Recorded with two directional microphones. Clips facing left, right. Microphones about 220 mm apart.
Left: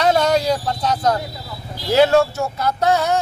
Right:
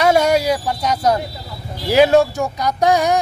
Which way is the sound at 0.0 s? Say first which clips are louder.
Right 2 dB; 10° right (ahead or behind).